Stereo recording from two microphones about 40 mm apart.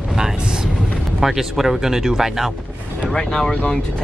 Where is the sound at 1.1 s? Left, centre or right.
Centre.